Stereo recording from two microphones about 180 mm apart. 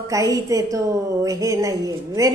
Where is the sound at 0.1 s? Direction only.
20° right (ahead or behind).